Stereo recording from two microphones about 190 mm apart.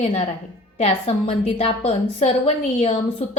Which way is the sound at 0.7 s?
35° left (ahead or behind).